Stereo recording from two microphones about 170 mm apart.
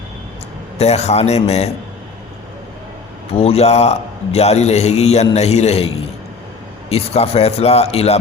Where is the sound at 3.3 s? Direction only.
35° left (ahead or behind).